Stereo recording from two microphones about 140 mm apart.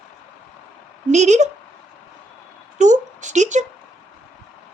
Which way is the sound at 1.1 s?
55° right (ahead or behind).